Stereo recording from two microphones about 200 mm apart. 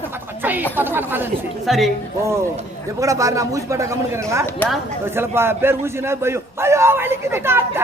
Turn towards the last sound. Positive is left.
turn(degrees=-10)  # may be behind; listen again after turning